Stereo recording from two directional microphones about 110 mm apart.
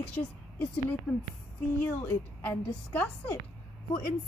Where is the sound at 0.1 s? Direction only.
15° left (ahead or behind).